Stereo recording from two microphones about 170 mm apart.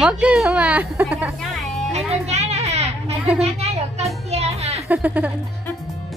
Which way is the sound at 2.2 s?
40° right (ahead or behind).